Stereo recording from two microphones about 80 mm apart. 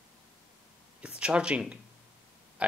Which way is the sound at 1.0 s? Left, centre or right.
Centre.